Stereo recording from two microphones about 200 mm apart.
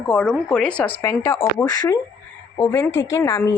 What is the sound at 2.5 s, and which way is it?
A woman's voice, 10° left (ahead or behind).